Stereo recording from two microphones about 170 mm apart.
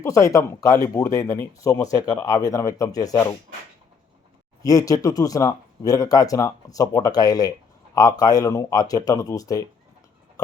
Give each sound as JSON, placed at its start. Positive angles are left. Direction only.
{"t": 0.0, "sound": "speech", "side_deg": 20}
{"t": 4.6, "sound": "speech", "side_deg": 20}